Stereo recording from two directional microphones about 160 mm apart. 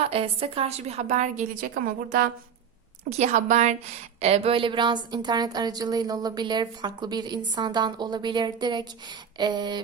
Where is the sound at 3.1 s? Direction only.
45° right (ahead or behind).